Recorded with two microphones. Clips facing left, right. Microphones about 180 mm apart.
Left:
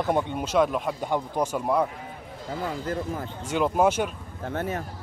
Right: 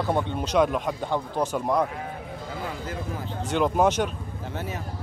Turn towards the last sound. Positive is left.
turn(degrees=50)  # may be behind; listen again after turning